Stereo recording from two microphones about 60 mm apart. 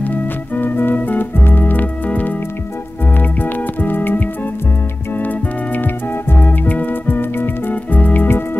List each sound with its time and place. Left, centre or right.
0.0 s music: left
6.4 s music: left